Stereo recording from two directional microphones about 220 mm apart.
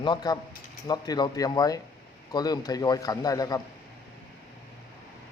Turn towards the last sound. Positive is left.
turn(degrees=15)  # may be behind; listen again after turning